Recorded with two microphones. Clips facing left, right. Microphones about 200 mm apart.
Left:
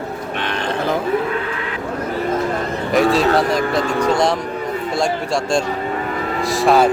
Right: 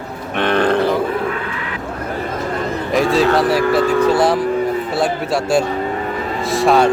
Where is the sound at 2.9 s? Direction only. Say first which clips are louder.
Even; centre (ahead or behind).